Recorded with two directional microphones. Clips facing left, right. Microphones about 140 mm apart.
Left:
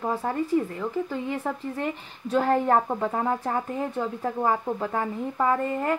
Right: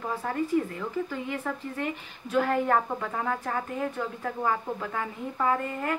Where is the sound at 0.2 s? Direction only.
30° left (ahead or behind).